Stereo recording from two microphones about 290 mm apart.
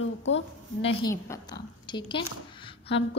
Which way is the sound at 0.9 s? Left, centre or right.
Centre.